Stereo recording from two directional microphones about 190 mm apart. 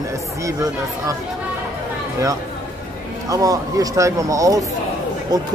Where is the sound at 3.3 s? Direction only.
20° right (ahead or behind).